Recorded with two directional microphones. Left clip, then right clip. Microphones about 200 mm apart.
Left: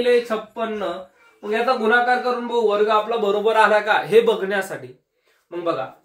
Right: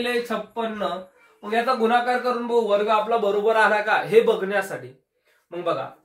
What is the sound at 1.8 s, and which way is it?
A man's voice, 15° left (ahead or behind).